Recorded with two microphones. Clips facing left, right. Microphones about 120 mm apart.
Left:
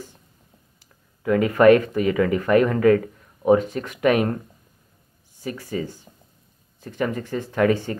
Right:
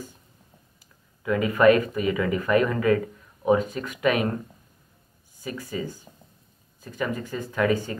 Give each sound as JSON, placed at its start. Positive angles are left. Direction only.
{"t": 1.2, "sound": "speech", "side_deg": 50}
{"t": 5.4, "sound": "speech", "side_deg": 50}
{"t": 6.8, "sound": "speech", "side_deg": 55}